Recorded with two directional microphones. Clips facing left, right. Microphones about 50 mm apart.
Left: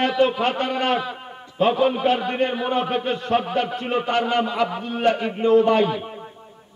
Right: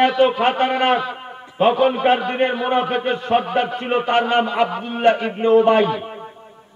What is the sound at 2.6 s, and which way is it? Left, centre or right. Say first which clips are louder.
A man's voice: right 3 dB; right.